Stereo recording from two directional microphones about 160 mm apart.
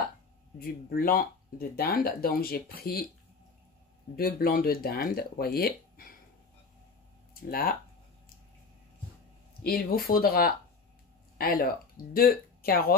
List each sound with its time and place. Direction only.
0.6 s speech: 65° left (ahead or behind)
4.2 s speech: 65° left (ahead or behind)
7.3 s speech: 65° left (ahead or behind)
9.6 s speech: 70° left (ahead or behind)